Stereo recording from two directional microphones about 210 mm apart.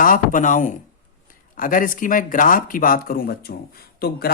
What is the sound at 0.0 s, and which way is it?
Speech, 40° left (ahead or behind).